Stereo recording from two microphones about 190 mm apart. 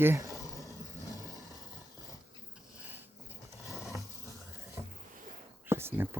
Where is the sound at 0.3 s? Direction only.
15° left (ahead or behind).